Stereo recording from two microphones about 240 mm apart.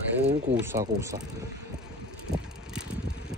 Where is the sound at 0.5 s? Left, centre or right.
Centre.